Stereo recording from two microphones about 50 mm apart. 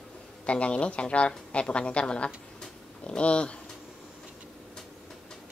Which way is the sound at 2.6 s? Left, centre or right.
Centre.